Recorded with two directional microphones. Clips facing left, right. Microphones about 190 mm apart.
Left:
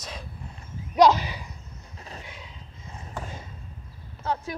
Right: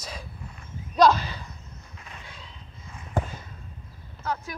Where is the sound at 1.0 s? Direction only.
15° left (ahead or behind).